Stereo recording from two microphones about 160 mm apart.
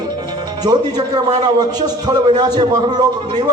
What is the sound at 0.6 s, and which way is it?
A man's voice, 25° right (ahead or behind).